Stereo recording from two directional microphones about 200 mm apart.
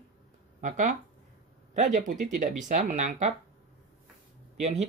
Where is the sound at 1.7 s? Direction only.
40° right (ahead or behind).